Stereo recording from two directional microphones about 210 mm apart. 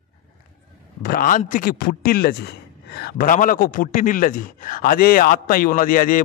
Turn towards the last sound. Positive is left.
turn(degrees=40)  # may be behind; listen again after turning